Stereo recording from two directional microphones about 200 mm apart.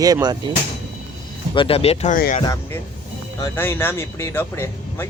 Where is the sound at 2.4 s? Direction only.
15° left (ahead or behind).